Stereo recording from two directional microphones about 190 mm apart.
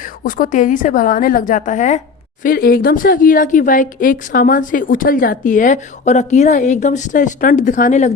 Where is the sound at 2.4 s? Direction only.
50° left (ahead or behind).